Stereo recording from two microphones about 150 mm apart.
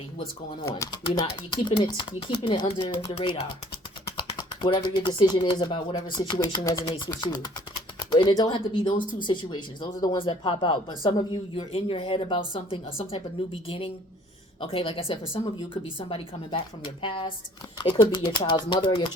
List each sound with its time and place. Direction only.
0.7 s speech: 30° left (ahead or behind)